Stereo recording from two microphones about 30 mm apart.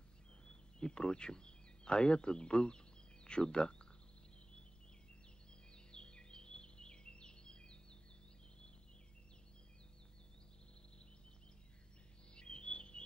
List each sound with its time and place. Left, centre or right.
0.5 s speech: left
5.9 s a sound: left
12.4 s chirp: left